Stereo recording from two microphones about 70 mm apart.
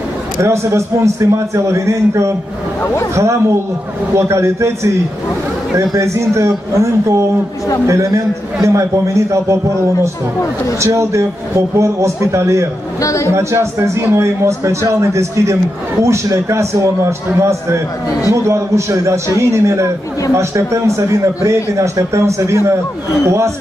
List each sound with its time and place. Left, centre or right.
0.4 s speech: right
2.8 s speech: left
3.2 s speech: right
5.9 s speech: right
7.8 s speech: right
10.8 s speech: right
13.0 s speech: left
13.3 s speech: right